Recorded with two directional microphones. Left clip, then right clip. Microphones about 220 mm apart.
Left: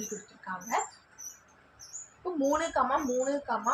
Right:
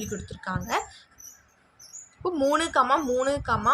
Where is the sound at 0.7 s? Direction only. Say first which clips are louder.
Right 2 dB; 45° right (ahead or behind).